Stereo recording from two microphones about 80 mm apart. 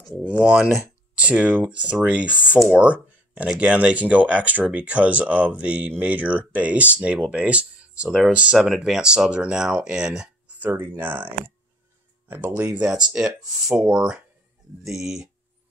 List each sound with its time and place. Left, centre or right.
0.2 s speech: centre
10.6 s speech: right; by 15.2 s centre